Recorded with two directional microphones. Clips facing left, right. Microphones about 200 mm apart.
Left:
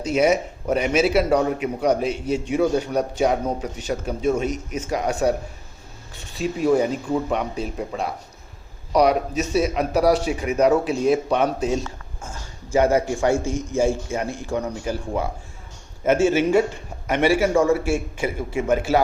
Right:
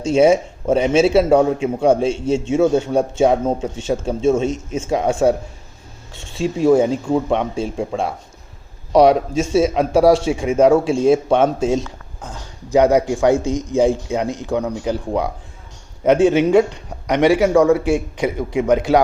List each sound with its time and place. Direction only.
0.0 s a man's voice: 30° right (ahead or behind)
16.2 s a man's voice: 15° right (ahead or behind)